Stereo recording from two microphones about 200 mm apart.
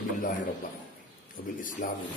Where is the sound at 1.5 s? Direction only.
40° left (ahead or behind).